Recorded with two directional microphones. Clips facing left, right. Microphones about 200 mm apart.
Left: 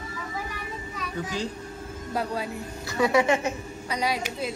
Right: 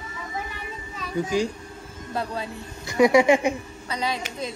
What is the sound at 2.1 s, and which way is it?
Speech, 10° left (ahead or behind).